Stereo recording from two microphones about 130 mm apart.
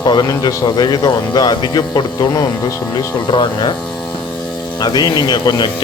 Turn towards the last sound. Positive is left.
turn(degrees=35)  # may be behind; listen again after turning